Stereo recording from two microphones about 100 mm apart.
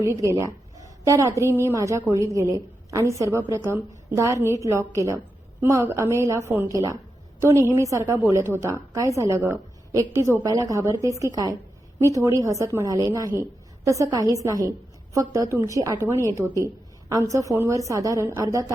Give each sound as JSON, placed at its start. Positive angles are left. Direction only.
{"t": 0.0, "sound": "a woman's voice", "side_deg": -35}